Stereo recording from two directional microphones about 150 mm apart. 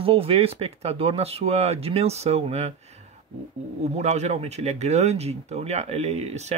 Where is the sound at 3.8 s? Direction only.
50° right (ahead or behind).